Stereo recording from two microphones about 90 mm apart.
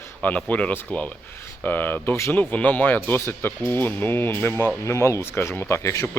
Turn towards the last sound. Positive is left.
turn(degrees=30)  # may be behind; listen again after turning